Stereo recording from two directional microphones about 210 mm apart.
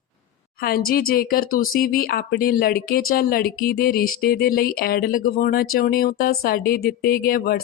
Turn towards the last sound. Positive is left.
turn(degrees=45)  # may be behind; listen again after turning